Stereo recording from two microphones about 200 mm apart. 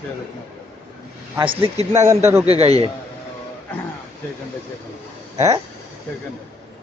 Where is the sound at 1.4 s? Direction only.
25° right (ahead or behind).